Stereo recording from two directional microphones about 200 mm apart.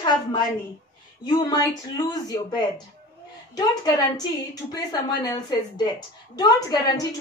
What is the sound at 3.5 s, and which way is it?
A woman's voice, 20° left (ahead or behind).